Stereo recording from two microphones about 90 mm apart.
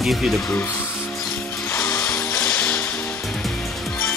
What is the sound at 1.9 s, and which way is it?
Music, 40° left (ahead or behind).